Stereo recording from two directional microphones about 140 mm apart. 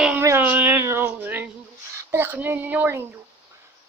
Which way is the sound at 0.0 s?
10° right (ahead or behind).